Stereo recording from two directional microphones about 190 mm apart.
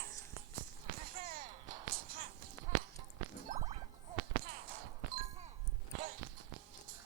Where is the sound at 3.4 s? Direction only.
35° right (ahead or behind).